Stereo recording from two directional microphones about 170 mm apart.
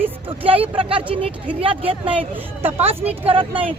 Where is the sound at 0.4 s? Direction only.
35° right (ahead or behind).